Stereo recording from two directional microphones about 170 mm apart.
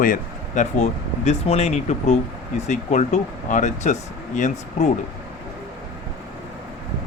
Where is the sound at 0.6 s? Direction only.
40° left (ahead or behind).